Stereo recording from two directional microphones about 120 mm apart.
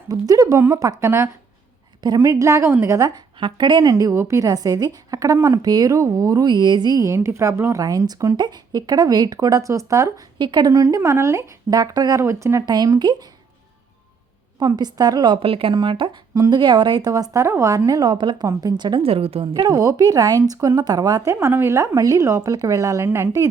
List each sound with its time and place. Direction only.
0.1 s a woman's voice: 30° right (ahead or behind)
3.4 s a woman's voice: 40° right (ahead or behind)
10.3 s a woman's voice: 40° right (ahead or behind)
14.6 s a woman's voice: 35° right (ahead or behind)
16.3 s speech: 25° right (ahead or behind)
16.6 s a woman's voice: 40° right (ahead or behind)
19.6 s a woman's voice: 30° right (ahead or behind)
21.3 s a woman's voice: 20° right (ahead or behind)